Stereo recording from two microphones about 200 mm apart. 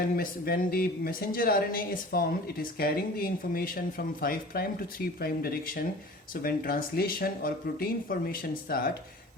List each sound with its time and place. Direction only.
0.2 s speech: 45° left (ahead or behind)